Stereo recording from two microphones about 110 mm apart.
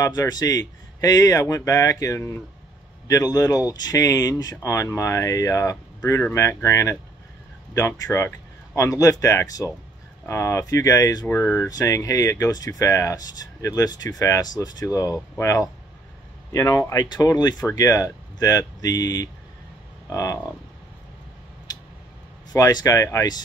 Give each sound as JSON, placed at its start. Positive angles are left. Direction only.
{"t": 0.0, "sound": "speech", "side_deg": 35}
{"t": 22.5, "sound": "speech", "side_deg": 35}